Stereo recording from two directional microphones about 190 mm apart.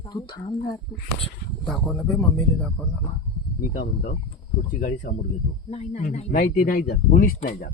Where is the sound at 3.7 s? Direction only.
50° left (ahead or behind).